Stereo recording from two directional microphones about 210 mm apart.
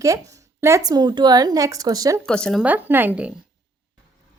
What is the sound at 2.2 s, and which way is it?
Speech, 5° left (ahead or behind).